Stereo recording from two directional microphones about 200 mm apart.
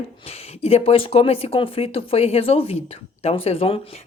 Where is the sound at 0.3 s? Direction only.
30° left (ahead or behind).